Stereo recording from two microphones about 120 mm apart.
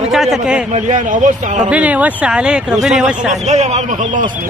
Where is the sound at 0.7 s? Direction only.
85° right.